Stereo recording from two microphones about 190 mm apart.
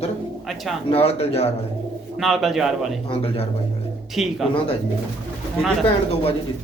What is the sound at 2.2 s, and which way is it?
Speech, centre (ahead or behind).